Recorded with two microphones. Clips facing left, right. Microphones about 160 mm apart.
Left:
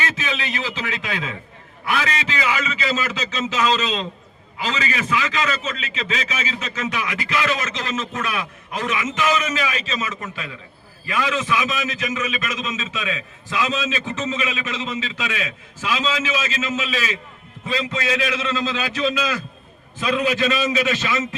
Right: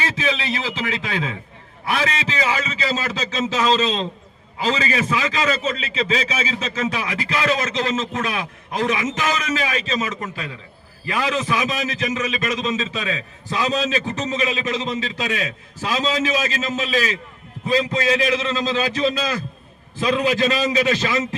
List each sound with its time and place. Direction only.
0.0 s a man's voice: 30° right (ahead or behind)